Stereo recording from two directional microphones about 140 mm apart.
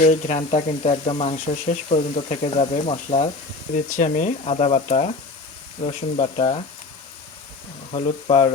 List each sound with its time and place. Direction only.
0.0 s speech: 55° left (ahead or behind)
4.4 s speech: 45° left (ahead or behind)
7.9 s speech: 55° left (ahead or behind)